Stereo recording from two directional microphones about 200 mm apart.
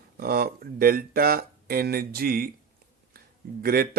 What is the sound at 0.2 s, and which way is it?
Speech, 50° right (ahead or behind).